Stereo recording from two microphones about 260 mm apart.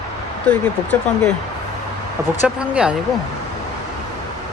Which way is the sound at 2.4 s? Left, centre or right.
Centre.